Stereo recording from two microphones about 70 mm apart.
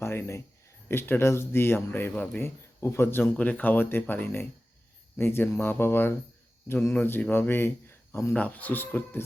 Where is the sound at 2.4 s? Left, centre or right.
Left.